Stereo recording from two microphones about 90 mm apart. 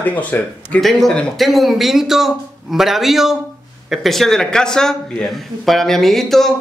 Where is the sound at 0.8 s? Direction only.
5° left (ahead or behind).